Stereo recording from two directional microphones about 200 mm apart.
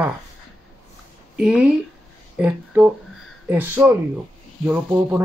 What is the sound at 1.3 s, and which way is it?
Speech, 5° right (ahead or behind).